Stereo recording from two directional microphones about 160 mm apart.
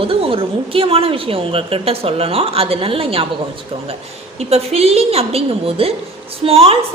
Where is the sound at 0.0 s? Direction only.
35° right (ahead or behind).